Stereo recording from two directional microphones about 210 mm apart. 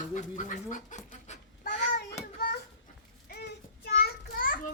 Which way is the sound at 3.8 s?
50° left (ahead or behind).